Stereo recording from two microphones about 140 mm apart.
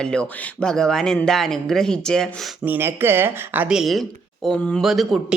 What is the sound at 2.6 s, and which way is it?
Speech, 15° right (ahead or behind).